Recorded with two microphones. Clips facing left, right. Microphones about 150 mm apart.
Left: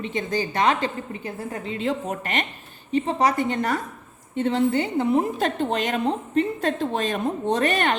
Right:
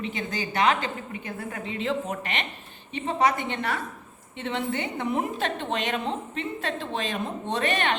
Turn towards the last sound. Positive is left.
turn(degrees=40)  # may be behind; listen again after turning